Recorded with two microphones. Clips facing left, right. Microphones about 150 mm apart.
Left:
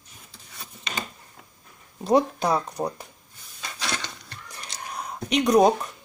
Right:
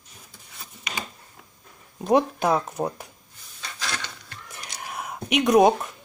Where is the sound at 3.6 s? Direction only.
20° left (ahead or behind).